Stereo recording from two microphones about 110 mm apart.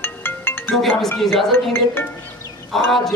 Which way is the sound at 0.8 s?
Centre (ahead or behind).